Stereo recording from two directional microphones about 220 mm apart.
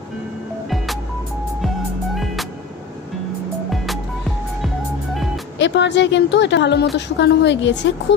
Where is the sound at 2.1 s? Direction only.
Centre (ahead or behind).